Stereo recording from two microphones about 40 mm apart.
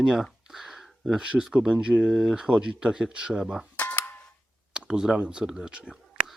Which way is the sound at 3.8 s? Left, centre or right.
Left.